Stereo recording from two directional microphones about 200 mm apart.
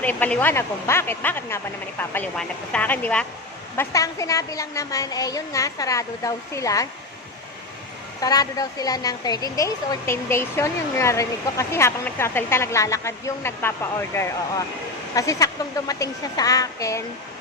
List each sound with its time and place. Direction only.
0.0 s a woman's voice: 10° left (ahead or behind)
8.2 s a woman's voice: 20° left (ahead or behind)